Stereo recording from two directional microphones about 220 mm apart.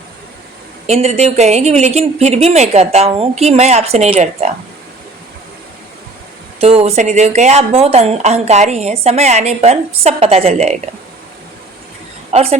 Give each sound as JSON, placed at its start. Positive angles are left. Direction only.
{"t": 0.9, "sound": "speech", "side_deg": -30}
{"t": 6.6, "sound": "speech", "side_deg": -30}
{"t": 12.3, "sound": "a woman's voice", "side_deg": -30}